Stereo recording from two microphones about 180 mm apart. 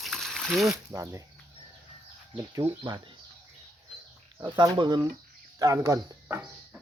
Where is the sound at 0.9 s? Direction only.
15° right (ahead or behind).